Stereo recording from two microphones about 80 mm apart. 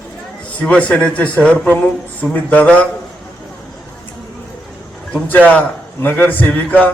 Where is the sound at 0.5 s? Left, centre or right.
Centre.